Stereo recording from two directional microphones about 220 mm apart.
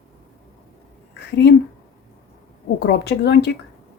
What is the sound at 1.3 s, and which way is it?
Speech, 50° left (ahead or behind).